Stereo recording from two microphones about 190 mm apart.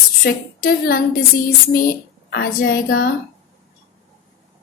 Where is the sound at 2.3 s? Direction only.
55° left (ahead or behind).